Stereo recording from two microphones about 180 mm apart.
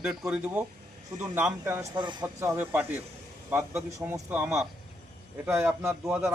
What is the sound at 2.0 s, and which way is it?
Speech, 25° right (ahead or behind).